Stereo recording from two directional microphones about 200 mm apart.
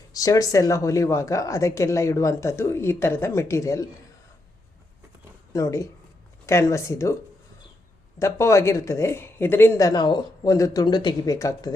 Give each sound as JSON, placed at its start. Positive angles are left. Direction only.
{"t": 0.1, "sound": "speech", "side_deg": 15}
{"t": 5.5, "sound": "speech", "side_deg": 15}
{"t": 8.2, "sound": "speech", "side_deg": 15}